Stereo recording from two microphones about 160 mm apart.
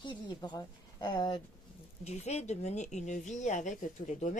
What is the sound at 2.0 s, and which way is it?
Speech, 45° left (ahead or behind).